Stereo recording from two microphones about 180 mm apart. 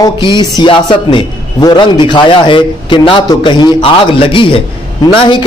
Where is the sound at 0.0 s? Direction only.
25° left (ahead or behind).